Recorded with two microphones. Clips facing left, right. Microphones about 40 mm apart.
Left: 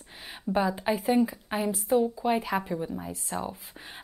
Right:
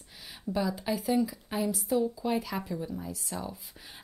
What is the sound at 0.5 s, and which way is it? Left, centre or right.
A woman's voice, left.